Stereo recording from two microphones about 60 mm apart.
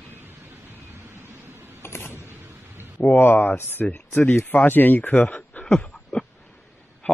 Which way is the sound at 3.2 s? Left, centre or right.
Left.